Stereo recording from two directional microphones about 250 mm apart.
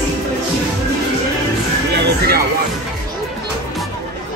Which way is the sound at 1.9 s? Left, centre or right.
Right.